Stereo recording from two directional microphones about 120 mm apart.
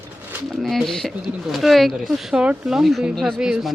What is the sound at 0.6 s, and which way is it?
Speech, centre (ahead or behind).